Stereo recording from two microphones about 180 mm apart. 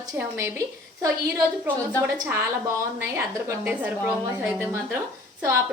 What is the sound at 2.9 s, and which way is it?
A woman's voice, 15° right (ahead or behind).